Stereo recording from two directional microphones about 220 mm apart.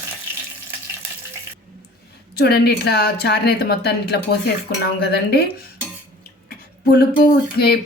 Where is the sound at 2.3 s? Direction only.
45° left (ahead or behind).